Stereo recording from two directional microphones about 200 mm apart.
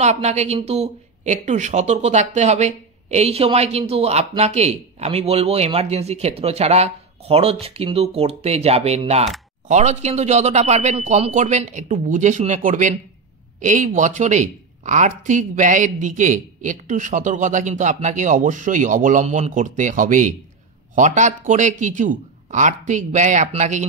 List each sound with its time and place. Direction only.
0.0 s speech: 35° right (ahead or behind)